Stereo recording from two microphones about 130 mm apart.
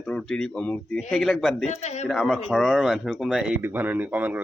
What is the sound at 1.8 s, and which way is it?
Speech, 60° left (ahead or behind).